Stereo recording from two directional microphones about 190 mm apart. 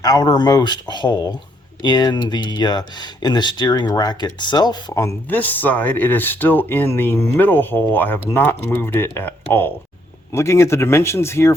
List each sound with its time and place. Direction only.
0.0 s speech: 20° left (ahead or behind)